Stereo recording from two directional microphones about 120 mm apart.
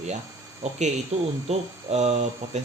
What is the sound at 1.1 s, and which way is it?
Speech, 70° right (ahead or behind).